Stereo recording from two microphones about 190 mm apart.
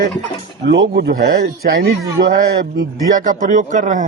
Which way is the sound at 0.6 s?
60° right (ahead or behind).